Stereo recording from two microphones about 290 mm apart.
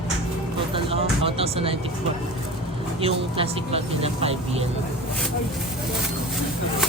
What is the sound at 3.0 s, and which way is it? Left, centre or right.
Speech, centre.